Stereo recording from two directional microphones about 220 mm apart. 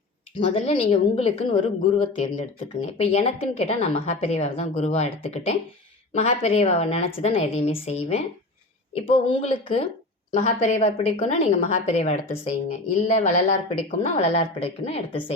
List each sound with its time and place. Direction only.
0.3 s speech: 25° left (ahead or behind)
10.3 s a woman's voice: 35° left (ahead or behind)